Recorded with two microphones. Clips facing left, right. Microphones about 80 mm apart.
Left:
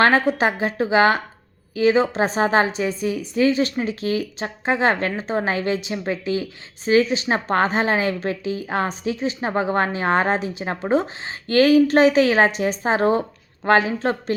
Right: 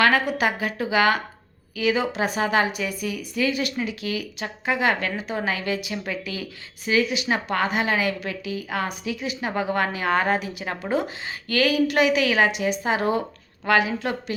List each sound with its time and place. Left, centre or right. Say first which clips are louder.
0.0 s a woman's voice: left 3 dB; left